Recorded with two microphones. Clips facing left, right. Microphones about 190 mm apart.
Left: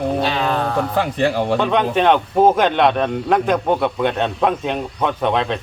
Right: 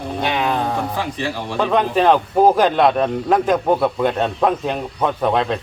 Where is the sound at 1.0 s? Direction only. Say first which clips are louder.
Left 6 dB; 55° left (ahead or behind).